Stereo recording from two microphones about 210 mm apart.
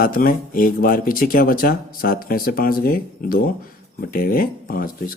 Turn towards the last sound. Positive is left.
turn(degrees=45)  # may be behind; listen again after turning